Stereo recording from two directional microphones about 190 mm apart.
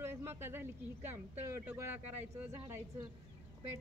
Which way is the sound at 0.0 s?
15° right (ahead or behind).